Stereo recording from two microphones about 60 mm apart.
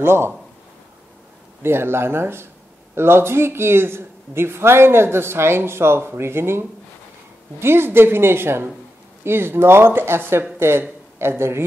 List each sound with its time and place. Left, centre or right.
0.0 s a man's voice: right
1.6 s a man's voice: right
7.6 s speech: right